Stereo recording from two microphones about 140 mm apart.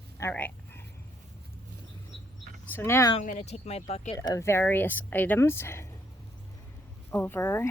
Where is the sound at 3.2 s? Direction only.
60° left (ahead or behind).